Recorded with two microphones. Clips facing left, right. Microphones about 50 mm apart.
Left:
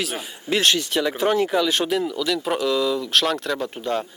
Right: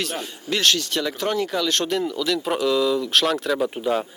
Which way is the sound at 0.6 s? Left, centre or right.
Left.